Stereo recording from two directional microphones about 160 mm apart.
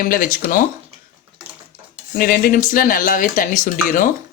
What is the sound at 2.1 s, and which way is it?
Speech, 65° left (ahead or behind).